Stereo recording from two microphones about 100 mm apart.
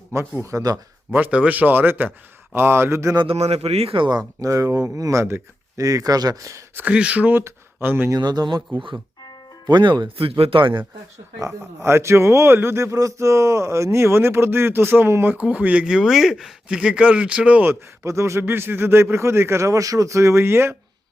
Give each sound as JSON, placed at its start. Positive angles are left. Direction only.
{"t": 0.1, "sound": "speech", "side_deg": -25}
{"t": 1.1, "sound": "a man's voice", "side_deg": -15}
{"t": 3.2, "sound": "speech", "side_deg": -90}
{"t": 4.4, "sound": "speech", "side_deg": -35}
{"t": 6.7, "sound": "a man's voice", "side_deg": -15}
{"t": 8.1, "sound": "speech", "side_deg": -40}
{"t": 11.3, "sound": "a man's voice", "side_deg": -30}
{"t": 18.0, "sound": "a man's voice", "side_deg": -30}